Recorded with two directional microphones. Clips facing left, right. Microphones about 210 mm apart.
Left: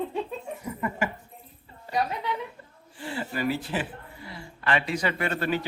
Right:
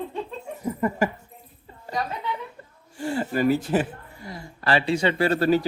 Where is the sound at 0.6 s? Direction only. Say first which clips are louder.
Right 7 dB; 40° right (ahead or behind).